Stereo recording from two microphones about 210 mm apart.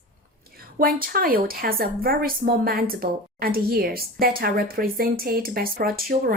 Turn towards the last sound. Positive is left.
turn(degrees=-45)  # may be behind; listen again after turning